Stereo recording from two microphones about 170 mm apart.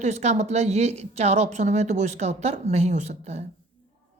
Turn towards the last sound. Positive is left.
turn(degrees=-40)  # may be behind; listen again after turning